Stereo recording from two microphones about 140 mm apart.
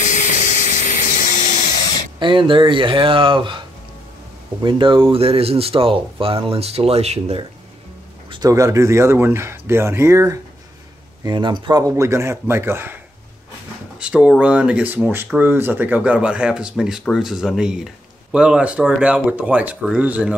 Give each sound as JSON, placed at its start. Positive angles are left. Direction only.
{"t": 0.0, "sound": "vehicle", "side_deg": 65}
{"t": 2.1, "sound": "speech", "side_deg": -35}
{"t": 4.6, "sound": "speech", "side_deg": -35}
{"t": 8.3, "sound": "speech", "side_deg": -25}
{"t": 11.2, "sound": "speech", "side_deg": -35}
{"t": 11.9, "sound": "speech", "side_deg": -20}
{"t": 13.9, "sound": "speech", "side_deg": -10}